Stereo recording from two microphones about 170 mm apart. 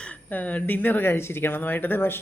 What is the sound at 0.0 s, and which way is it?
Speech, 10° left (ahead or behind).